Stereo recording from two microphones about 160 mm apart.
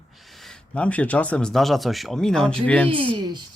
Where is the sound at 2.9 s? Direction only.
30° right (ahead or behind).